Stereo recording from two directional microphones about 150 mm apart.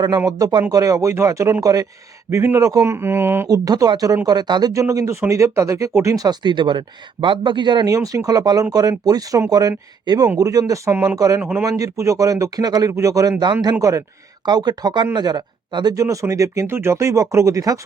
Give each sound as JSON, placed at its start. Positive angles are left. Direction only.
{"t": 0.3, "sound": "speech", "side_deg": -25}
{"t": 11.2, "sound": "speech", "side_deg": -20}